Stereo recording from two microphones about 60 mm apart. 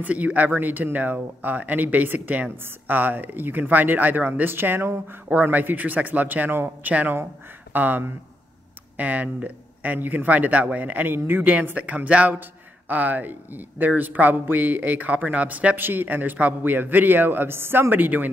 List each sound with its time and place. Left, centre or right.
0.0 s speech: right
5.3 s speech: right